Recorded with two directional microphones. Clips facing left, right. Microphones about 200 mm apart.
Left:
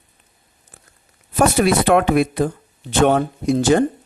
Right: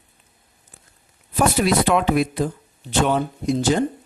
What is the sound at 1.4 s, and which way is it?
Speech, 55° left (ahead or behind).